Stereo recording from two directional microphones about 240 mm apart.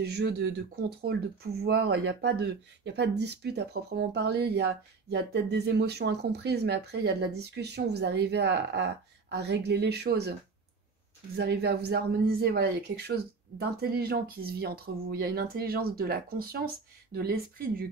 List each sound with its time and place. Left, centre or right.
0.0 s speech: right
11.3 s speech: right